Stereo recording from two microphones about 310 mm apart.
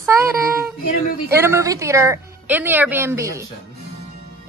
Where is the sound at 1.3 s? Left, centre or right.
Centre.